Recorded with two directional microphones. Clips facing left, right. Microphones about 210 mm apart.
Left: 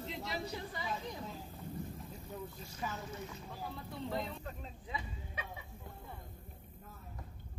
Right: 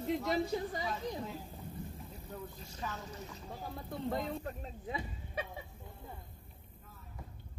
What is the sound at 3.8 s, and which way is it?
Speech, 50° right (ahead or behind).